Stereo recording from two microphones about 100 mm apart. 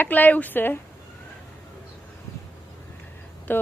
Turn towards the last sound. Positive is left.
turn(degrees=20)  # may be behind; listen again after turning